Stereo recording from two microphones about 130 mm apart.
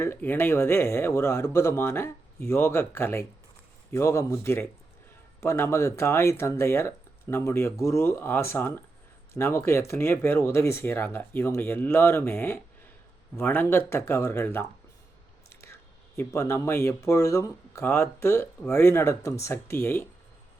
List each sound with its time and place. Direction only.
0.0 s speech: 15° left (ahead or behind)
16.1 s speech: 20° left (ahead or behind)